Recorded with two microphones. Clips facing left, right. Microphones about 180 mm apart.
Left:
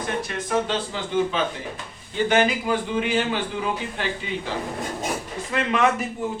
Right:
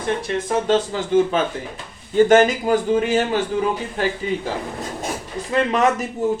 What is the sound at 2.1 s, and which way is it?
A man's voice, 45° right (ahead or behind).